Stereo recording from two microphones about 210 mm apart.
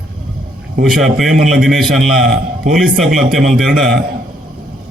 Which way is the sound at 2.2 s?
40° right (ahead or behind).